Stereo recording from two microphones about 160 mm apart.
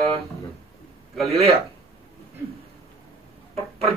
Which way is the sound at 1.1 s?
Centre (ahead or behind).